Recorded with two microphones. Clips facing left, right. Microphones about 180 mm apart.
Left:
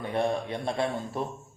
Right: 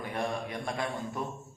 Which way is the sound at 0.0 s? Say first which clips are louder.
Left 6 dB; 30° left (ahead or behind).